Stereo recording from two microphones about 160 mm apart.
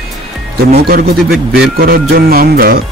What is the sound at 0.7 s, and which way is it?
Speech, 70° right (ahead or behind).